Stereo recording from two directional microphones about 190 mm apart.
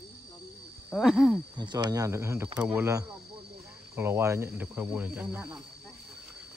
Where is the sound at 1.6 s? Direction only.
20° right (ahead or behind).